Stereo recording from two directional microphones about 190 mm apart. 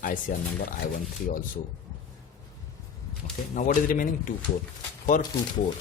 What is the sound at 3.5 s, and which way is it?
Speech, 45° left (ahead or behind).